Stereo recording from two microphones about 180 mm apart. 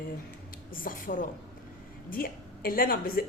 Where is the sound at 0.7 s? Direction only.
50° left (ahead or behind).